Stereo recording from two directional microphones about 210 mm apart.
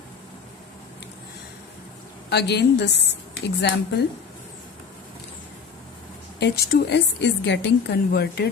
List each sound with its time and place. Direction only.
2.3 s a woman's voice: 55° left (ahead or behind)
6.4 s a woman's voice: 50° left (ahead or behind)